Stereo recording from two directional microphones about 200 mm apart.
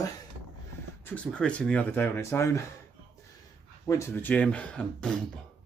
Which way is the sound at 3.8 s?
15° left (ahead or behind).